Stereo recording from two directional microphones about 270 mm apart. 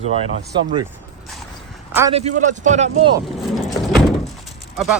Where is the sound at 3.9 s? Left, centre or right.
Centre.